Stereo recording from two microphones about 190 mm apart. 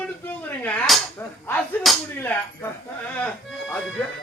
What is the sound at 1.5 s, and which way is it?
Speech, centre (ahead or behind).